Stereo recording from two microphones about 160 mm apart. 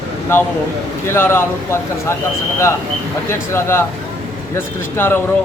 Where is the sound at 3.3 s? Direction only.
15° left (ahead or behind).